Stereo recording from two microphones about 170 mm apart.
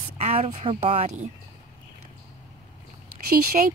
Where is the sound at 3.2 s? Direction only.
60° right (ahead or behind).